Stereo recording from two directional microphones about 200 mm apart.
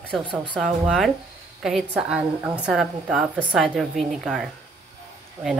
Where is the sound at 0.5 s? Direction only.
Centre (ahead or behind).